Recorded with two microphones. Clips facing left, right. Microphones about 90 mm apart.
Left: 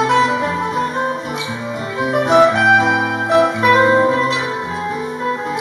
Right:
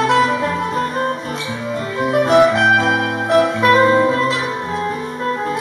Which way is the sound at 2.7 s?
10° left (ahead or behind).